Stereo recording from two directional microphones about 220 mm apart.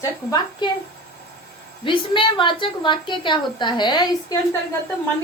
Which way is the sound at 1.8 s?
20° left (ahead or behind).